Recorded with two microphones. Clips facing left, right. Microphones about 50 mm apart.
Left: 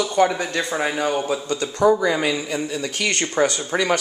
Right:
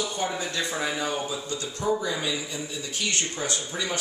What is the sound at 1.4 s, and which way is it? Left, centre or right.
Speech, left.